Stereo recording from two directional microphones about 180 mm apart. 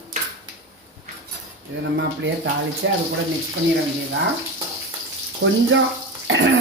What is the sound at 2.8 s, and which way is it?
Speech, 90° right.